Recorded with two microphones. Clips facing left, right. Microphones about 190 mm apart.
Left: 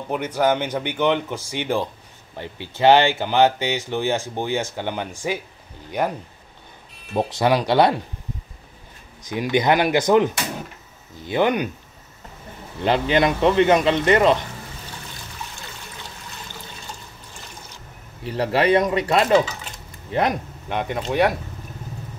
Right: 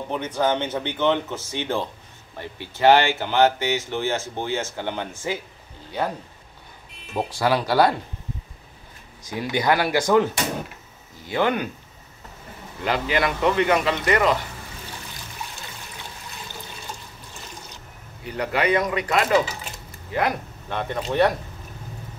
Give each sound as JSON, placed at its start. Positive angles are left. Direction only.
{"t": 0.1, "sound": "speech", "side_deg": 10}
{"t": 7.2, "sound": "speech", "side_deg": 20}
{"t": 9.2, "sound": "speech", "side_deg": 20}
{"t": 12.8, "sound": "speech", "side_deg": 25}
{"t": 18.2, "sound": "speech", "side_deg": 30}